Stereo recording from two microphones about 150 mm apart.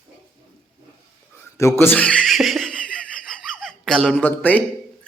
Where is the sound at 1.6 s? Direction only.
20° left (ahead or behind).